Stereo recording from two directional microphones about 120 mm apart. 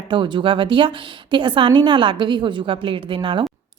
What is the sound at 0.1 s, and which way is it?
A woman's voice, 40° right (ahead or behind).